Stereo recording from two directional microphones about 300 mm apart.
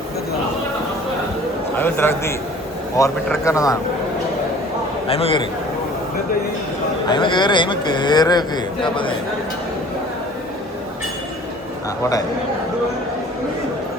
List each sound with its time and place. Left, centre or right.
1.7 s a man's voice: centre
5.0 s a man's voice: centre
7.1 s a man's voice: centre